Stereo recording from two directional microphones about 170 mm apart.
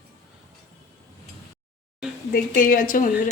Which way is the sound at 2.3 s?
55° left (ahead or behind).